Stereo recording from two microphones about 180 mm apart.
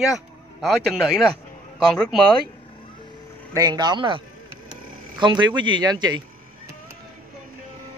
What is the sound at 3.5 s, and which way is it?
Speech, 20° right (ahead or behind).